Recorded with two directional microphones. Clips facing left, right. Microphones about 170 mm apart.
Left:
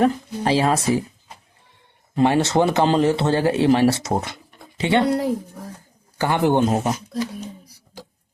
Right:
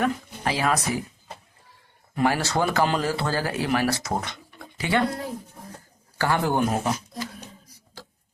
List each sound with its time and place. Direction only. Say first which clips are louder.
0.0 s speech: left 6 dB; 30° left (ahead or behind)
2.1 s speech: left 6 dB; 25° left (ahead or behind)
6.1 s speech: left 5 dB; 20° left (ahead or behind)